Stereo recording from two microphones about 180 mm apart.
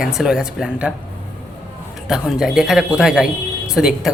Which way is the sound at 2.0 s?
5° right (ahead or behind).